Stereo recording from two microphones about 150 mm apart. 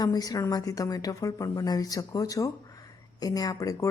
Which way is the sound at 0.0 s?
25° left (ahead or behind).